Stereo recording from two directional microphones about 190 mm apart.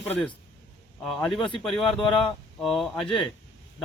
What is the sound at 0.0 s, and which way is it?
Speech, 5° left (ahead or behind).